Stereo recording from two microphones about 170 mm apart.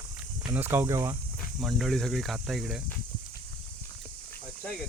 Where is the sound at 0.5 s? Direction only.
10° right (ahead or behind).